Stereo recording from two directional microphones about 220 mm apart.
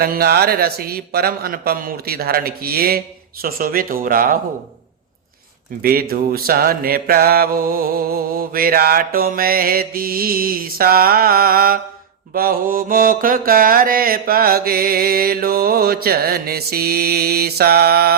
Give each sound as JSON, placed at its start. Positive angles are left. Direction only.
{"t": 0.0, "sound": "mantra", "side_deg": -45}
{"t": 3.4, "sound": "speech", "side_deg": -40}
{"t": 5.8, "sound": "mantra", "side_deg": -45}